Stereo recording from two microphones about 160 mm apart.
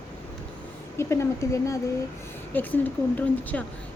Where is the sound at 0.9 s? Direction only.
15° left (ahead or behind).